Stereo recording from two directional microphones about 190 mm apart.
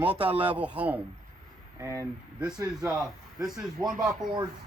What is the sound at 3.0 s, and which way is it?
Speech, centre (ahead or behind).